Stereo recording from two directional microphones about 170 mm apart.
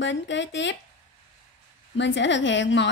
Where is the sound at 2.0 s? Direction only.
90° left.